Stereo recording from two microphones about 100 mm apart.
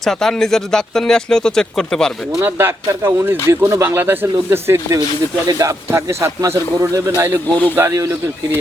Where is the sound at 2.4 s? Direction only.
25° right (ahead or behind).